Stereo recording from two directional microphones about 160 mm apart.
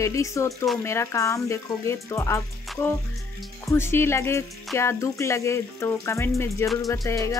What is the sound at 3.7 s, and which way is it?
A woman's voice, 15° left (ahead or behind).